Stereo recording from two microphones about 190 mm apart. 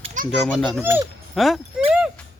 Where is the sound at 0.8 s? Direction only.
15° right (ahead or behind).